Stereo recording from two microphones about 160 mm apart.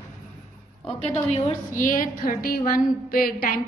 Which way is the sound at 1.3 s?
55° left (ahead or behind).